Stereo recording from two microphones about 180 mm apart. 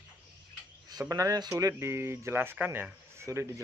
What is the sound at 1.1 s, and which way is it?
Speech, 20° right (ahead or behind).